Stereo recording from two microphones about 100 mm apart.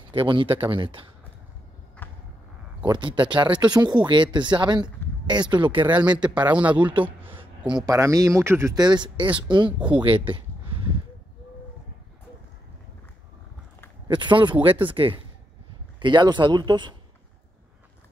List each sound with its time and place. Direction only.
0.1 s speech: 55° right (ahead or behind)
2.0 s a sound: 15° left (ahead or behind)
2.8 s speech: 50° right (ahead or behind)
5.9 s speech: 10° right (ahead or behind)
7.2 s a sound: 55° right (ahead or behind)
7.8 s speech: 35° right (ahead or behind)
8.7 s speech: 45° right (ahead or behind)
14.0 s speech: 50° right (ahead or behind)